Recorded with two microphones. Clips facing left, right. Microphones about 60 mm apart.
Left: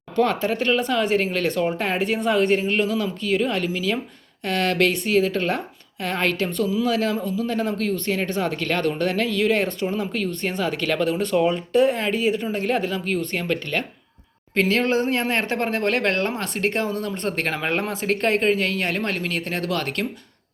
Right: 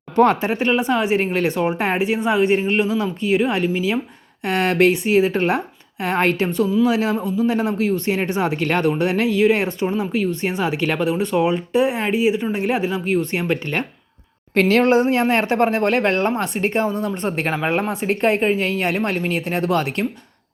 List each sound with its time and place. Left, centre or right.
0.2 s speech: right
2.0 s speech: centre; by 13.8 s right
14.5 s speech: right
16.0 s speech: right